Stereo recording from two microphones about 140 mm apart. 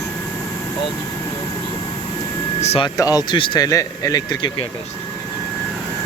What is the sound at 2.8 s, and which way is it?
Speech, 25° left (ahead or behind).